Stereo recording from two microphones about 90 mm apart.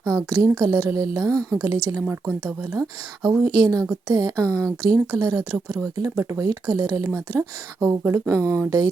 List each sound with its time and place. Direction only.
0.0 s speech: 40° right (ahead or behind)